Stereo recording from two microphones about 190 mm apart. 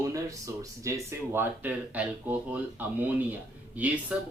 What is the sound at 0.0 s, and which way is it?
Speech, 15° right (ahead or behind).